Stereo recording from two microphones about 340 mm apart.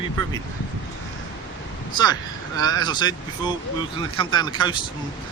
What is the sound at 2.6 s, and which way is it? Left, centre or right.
Speech, centre.